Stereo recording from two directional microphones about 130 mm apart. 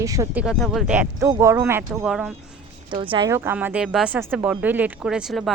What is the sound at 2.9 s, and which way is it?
Speech, 40° right (ahead or behind).